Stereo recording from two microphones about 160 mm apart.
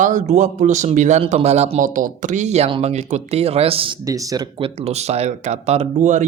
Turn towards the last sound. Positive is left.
turn(degrees=-50)  # may be behind; listen again after turning